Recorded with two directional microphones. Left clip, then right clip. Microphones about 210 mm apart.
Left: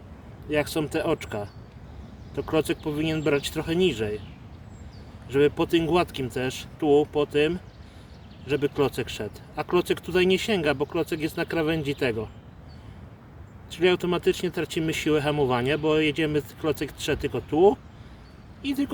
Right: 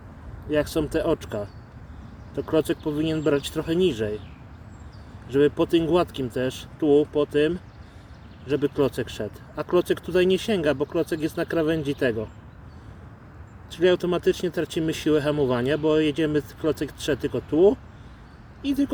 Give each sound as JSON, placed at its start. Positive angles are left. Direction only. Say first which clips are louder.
{"t": 0.5, "sound": "speech", "louder": "right 2 dB", "side_deg": -10}
{"t": 2.5, "sound": "speech", "louder": "right 2 dB", "side_deg": -15}
{"t": 5.3, "sound": "speech", "louder": "right 1 dB", "side_deg": -15}
{"t": 13.7, "sound": "speech", "louder": "right 2 dB", "side_deg": -10}
{"t": 18.6, "sound": "speech", "louder": "right 3 dB", "side_deg": 15}